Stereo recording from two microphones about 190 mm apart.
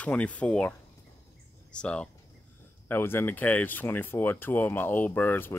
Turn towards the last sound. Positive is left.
turn(degrees=10)  # may be behind; listen again after turning